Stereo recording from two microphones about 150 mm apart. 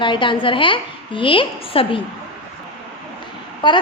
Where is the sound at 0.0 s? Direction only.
35° left (ahead or behind).